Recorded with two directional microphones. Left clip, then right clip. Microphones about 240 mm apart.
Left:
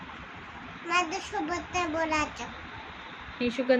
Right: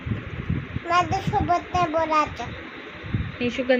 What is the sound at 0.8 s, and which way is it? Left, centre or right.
A child's voice, centre.